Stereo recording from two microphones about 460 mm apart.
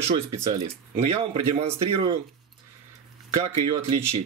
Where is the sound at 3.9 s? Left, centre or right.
Centre.